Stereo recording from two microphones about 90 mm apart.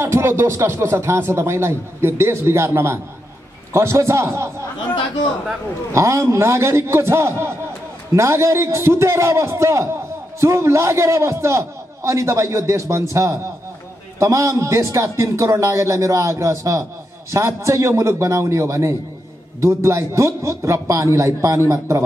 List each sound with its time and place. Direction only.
0.0 s a man's voice: 30° right (ahead or behind)
5.9 s a man's voice: 35° right (ahead or behind)